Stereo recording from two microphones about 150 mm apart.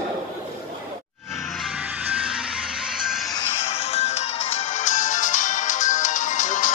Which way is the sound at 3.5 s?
45° left (ahead or behind).